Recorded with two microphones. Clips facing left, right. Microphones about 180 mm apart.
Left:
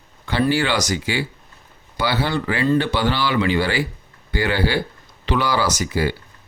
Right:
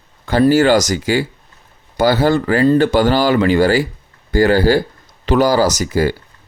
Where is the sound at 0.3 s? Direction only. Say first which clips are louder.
Right 8 dB; 45° right (ahead or behind).